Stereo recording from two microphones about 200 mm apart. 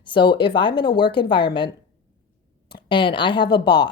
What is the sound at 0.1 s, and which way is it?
A woman's voice, 25° left (ahead or behind).